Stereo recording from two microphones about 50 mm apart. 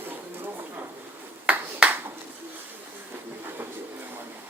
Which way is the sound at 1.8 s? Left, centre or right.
Centre.